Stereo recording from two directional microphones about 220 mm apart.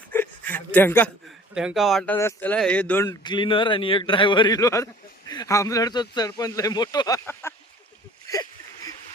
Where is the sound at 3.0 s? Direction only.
20° left (ahead or behind).